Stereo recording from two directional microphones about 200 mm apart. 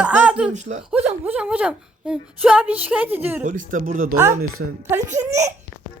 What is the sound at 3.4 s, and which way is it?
Speech, 40° right (ahead or behind).